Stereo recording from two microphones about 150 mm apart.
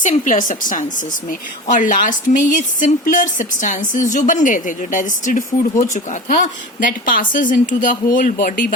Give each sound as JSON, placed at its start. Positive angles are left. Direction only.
{"t": 0.0, "sound": "speech", "side_deg": 55}